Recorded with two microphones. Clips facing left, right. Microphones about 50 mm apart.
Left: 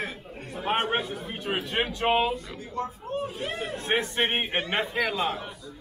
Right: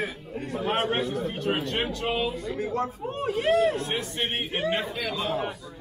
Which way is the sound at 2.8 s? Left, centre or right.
Right.